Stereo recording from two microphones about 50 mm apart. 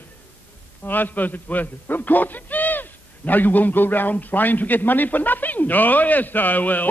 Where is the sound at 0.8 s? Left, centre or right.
Left.